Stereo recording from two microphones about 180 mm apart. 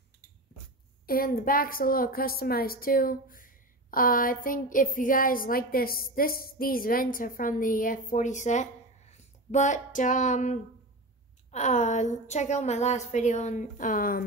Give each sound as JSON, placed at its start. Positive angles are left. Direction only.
{"t": 1.0, "sound": "a woman's voice", "side_deg": 55}